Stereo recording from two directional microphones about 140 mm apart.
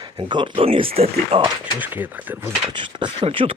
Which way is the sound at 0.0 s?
35° right (ahead or behind).